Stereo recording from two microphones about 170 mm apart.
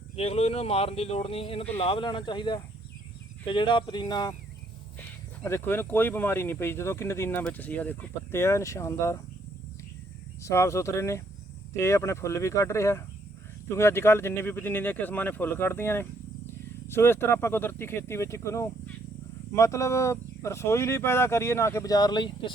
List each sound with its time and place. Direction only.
0.2 s speech: 35° left (ahead or behind); by 9.2 s 20° left (ahead or behind)
10.4 s speech: 15° left (ahead or behind)